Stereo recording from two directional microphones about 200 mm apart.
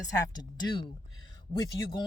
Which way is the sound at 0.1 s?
20° left (ahead or behind).